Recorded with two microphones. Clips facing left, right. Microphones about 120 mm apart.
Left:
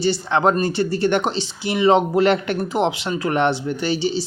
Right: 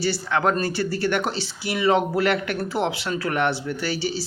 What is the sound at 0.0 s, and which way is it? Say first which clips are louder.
Speech: left 4 dB; 25° left (ahead or behind).